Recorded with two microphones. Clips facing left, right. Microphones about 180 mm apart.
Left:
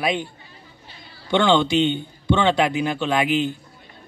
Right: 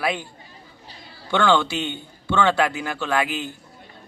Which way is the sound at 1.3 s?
20° left (ahead or behind).